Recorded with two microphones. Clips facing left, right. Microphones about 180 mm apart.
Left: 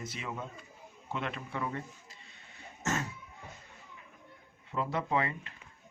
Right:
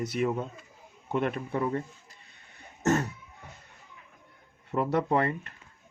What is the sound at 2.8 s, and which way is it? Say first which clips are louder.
Cough: right 9 dB; 60° right (ahead or behind).